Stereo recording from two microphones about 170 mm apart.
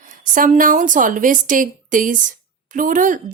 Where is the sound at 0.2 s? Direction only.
50° right (ahead or behind).